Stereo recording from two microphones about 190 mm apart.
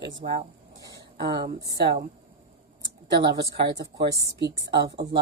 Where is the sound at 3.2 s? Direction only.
25° right (ahead or behind).